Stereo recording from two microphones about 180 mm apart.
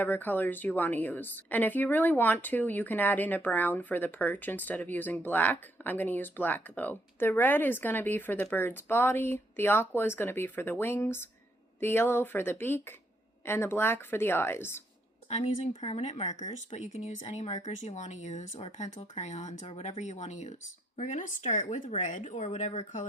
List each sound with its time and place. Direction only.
0.0 s a woman's voice: 10° left (ahead or behind)
15.3 s speech: 40° left (ahead or behind)